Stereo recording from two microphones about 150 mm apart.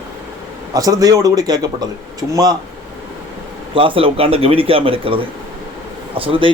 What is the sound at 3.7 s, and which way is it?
A man's voice, 35° right (ahead or behind).